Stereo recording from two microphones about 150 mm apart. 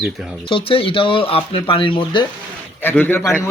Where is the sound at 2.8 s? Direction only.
15° left (ahead or behind).